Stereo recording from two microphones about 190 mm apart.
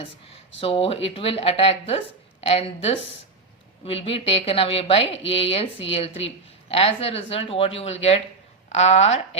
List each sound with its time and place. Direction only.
0.6 s a woman's voice: 30° left (ahead or behind)